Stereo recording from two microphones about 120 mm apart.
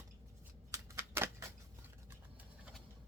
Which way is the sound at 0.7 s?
25° right (ahead or behind).